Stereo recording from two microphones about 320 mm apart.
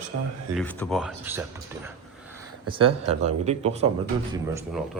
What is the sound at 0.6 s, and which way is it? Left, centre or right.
Speech, centre.